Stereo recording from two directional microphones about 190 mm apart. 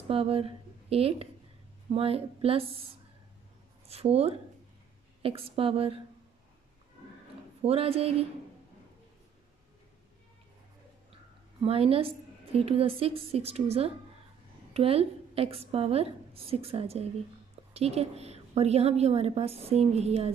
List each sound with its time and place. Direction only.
0.1 s a woman's voice: 30° right (ahead or behind)
3.8 s a woman's voice: 30° right (ahead or behind)
7.6 s a woman's voice: 30° right (ahead or behind)
11.6 s a woman's voice: 30° right (ahead or behind)